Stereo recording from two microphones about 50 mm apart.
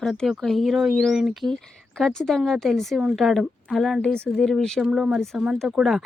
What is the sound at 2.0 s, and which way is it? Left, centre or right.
Speech, centre.